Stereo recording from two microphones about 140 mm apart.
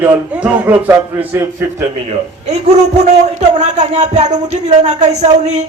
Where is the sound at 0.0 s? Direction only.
10° right (ahead or behind).